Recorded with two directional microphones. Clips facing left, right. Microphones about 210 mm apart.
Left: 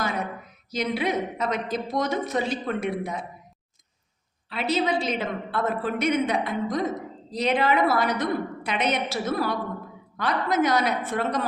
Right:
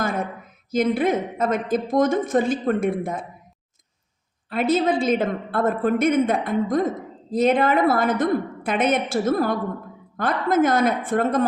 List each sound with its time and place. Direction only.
0.0 s a sound: 50° right (ahead or behind)
0.7 s a woman's voice: 50° right (ahead or behind)
4.4 s a woman's voice: 50° right (ahead or behind)